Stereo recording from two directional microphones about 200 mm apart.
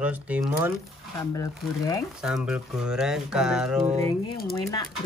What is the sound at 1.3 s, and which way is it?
Speech, 20° left (ahead or behind).